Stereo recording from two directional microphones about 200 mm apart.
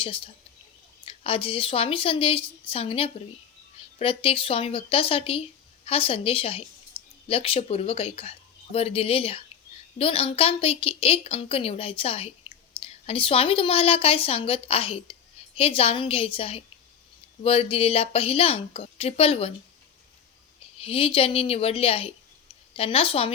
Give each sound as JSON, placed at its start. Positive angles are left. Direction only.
{"t": 1.0, "sound": "a woman's voice", "side_deg": 30}
{"t": 20.7, "sound": "speech", "side_deg": 30}